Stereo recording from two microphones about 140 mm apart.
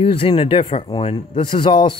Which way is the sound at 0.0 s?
40° left (ahead or behind).